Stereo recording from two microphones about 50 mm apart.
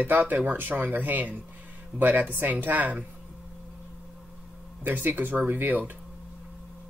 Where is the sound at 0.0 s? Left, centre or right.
Right.